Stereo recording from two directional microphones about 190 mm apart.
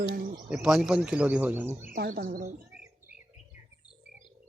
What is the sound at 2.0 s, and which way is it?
Speech, 50° right (ahead or behind).